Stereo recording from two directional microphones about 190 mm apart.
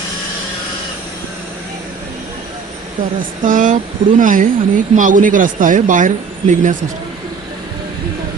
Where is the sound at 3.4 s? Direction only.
45° right (ahead or behind).